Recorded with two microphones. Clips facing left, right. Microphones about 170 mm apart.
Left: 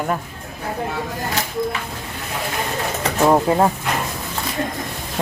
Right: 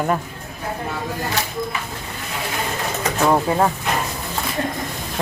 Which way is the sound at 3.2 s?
15° left (ahead or behind).